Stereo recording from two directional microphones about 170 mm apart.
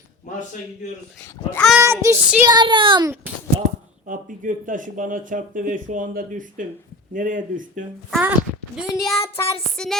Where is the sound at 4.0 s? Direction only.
50° right (ahead or behind).